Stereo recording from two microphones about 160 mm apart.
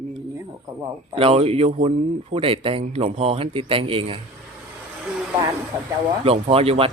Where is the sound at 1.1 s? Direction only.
35° right (ahead or behind).